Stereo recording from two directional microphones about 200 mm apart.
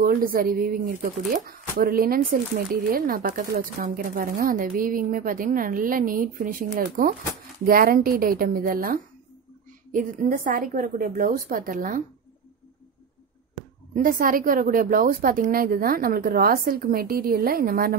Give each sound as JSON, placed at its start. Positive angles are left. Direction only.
{"t": 0.0, "sound": "speech", "side_deg": -45}
{"t": 13.9, "sound": "speech", "side_deg": -45}